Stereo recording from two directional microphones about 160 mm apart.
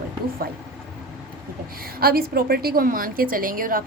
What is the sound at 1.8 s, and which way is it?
A woman's voice, 70° right (ahead or behind).